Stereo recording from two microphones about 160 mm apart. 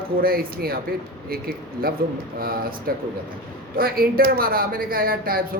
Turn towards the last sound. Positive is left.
turn(degrees=-65)  # may be behind; listen again after turning